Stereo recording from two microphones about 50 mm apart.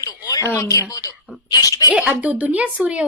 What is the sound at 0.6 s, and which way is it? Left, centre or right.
Speech, left.